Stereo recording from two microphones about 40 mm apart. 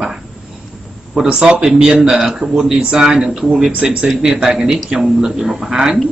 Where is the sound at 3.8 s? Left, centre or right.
Right.